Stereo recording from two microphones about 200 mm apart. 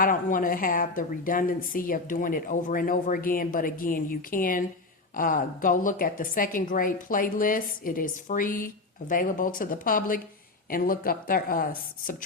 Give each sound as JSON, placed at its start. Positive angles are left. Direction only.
{"t": 0.0, "sound": "a woman's voice", "side_deg": 45}